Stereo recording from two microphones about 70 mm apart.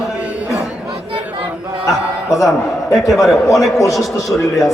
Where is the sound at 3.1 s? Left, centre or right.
Centre.